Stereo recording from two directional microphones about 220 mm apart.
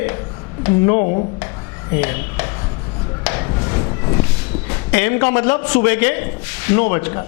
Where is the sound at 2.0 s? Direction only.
15° left (ahead or behind).